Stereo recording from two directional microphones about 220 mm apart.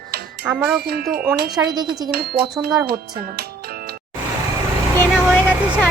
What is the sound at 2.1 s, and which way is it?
Speech, 45° right (ahead or behind).